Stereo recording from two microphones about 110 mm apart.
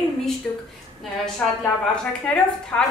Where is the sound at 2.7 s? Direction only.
15° left (ahead or behind).